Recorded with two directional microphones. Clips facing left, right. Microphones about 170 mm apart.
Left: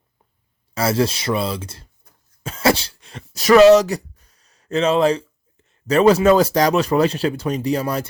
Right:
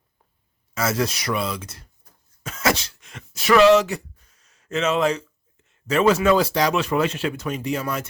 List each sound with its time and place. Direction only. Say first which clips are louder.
0.7 s speech: left 4 dB; 30° left (ahead or behind)
2.4 s throat clearing: left 5 dB; 30° left (ahead or behind)
5.6 s speech: left 5 dB; 35° left (ahead or behind)